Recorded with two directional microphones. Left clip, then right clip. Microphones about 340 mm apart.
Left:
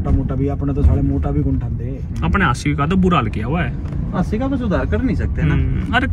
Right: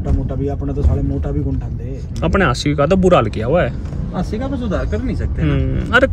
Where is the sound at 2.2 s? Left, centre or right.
Centre.